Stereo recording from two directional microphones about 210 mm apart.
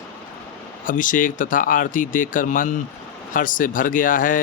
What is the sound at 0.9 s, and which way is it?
A man's voice, 40° left (ahead or behind).